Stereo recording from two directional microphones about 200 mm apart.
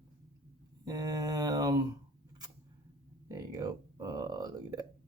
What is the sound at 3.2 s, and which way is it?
Speech, 20° right (ahead or behind).